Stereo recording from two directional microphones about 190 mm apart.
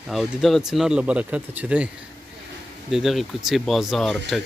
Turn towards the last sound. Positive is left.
turn(degrees=0)  # may be behind; listen again after turning